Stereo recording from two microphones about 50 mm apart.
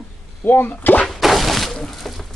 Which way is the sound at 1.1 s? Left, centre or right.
Centre.